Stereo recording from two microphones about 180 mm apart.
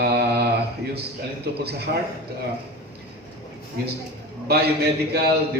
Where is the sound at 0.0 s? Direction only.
60° right (ahead or behind).